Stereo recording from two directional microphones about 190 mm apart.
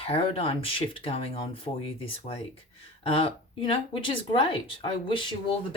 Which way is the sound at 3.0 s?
30° left (ahead or behind).